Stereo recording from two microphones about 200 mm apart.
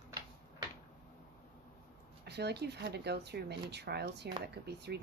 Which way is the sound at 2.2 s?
55° right (ahead or behind).